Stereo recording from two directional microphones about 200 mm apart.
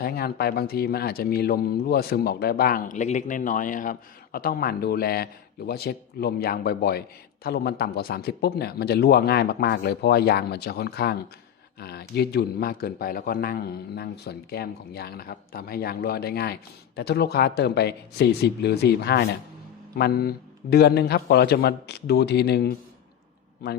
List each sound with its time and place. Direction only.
0.0 s a man's voice: 50° left (ahead or behind)